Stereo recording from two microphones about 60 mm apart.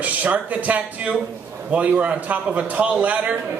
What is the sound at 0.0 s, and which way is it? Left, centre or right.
Speech, right.